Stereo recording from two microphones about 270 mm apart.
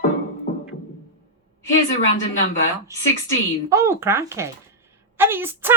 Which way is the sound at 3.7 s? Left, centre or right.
Centre.